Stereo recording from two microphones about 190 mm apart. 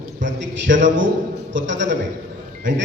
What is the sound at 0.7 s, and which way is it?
A man's voice, 75° right (ahead or behind).